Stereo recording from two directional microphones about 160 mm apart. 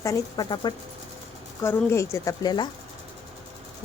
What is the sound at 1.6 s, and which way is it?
Speech, 15° left (ahead or behind).